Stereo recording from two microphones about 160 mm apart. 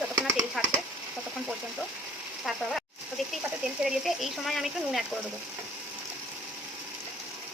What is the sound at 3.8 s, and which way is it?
Speech, centre (ahead or behind).